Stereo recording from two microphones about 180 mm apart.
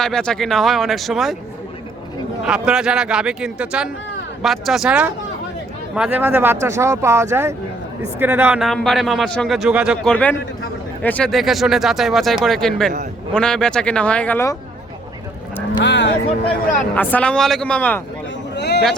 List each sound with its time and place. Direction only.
0.0 s a man's voice: 5° left (ahead or behind)
2.5 s a man's voice: 5° right (ahead or behind); by 14.5 s 10° left (ahead or behind)
15.8 s speech: 75° left (ahead or behind)
16.9 s speech: 10° left (ahead or behind)
18.5 s a sound: 70° left (ahead or behind)